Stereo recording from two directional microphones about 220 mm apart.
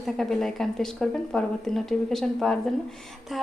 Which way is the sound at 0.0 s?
Centre (ahead or behind).